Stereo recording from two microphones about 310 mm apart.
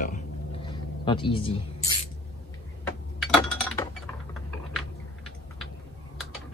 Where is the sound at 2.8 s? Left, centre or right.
Centre.